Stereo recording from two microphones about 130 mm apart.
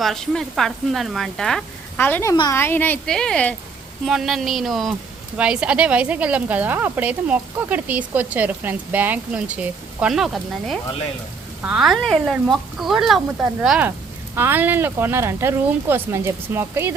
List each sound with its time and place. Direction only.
0.0 s speech: 5° left (ahead or behind)
2.0 s speech: 15° left (ahead or behind); by 16.9 s 20° right (ahead or behind)